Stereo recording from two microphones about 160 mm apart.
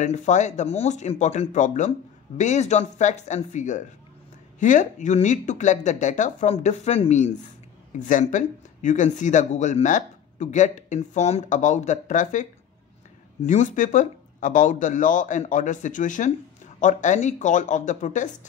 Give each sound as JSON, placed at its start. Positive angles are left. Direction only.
{"t": 0.0, "sound": "speech", "side_deg": 45}
{"t": 13.5, "sound": "speech", "side_deg": 50}